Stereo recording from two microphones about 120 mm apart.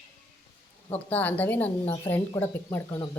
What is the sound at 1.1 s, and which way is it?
A woman's voice, 15° left (ahead or behind).